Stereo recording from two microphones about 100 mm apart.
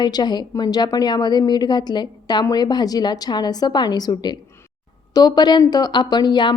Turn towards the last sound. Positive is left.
turn(degrees=45)  # may be behind; listen again after turning